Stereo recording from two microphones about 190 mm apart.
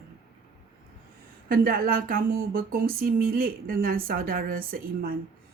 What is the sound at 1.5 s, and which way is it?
Speech, 50° right (ahead or behind).